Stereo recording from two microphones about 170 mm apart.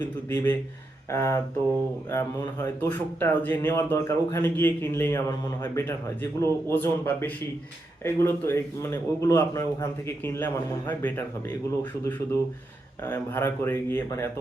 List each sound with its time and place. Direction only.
0.3 s speech: 15° left (ahead or behind)